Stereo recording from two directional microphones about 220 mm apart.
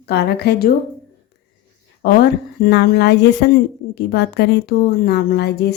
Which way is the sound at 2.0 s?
45° left (ahead or behind).